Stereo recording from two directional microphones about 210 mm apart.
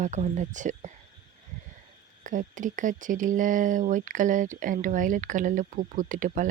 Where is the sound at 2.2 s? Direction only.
40° right (ahead or behind).